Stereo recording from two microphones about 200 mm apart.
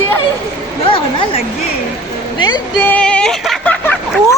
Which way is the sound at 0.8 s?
25° left (ahead or behind).